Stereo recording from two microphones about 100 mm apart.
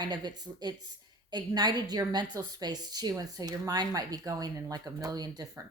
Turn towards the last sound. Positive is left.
turn(degrees=-40)  # may be behind; listen again after turning